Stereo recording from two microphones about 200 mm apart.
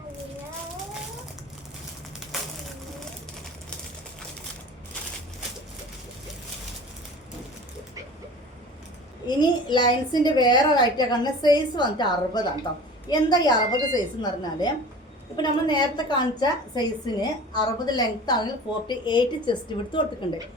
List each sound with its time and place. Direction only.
9.2 s a woman's voice: 20° left (ahead or behind)